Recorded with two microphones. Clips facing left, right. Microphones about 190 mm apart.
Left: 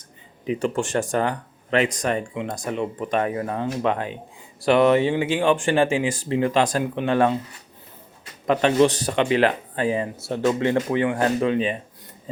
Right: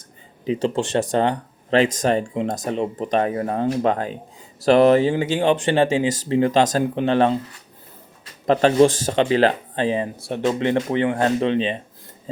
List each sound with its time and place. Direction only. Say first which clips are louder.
0.4 s speech: right 2 dB; 25° right (ahead or behind)
5.4 s speech: right 2 dB; 20° right (ahead or behind)
8.4 s speech: right 3 dB; 35° right (ahead or behind)